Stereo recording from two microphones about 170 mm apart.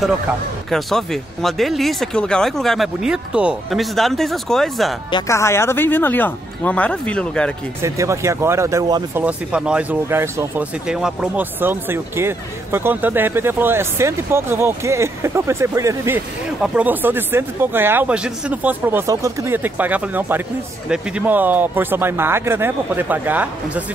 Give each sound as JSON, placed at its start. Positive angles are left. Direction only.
{"t": 0.7, "sound": "speech", "side_deg": 0}
{"t": 5.3, "sound": "speech", "side_deg": 15}
{"t": 7.8, "sound": "speech", "side_deg": -15}
{"t": 9.1, "sound": "speech", "side_deg": -5}